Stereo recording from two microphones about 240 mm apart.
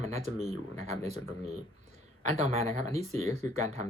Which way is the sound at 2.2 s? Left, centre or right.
Right.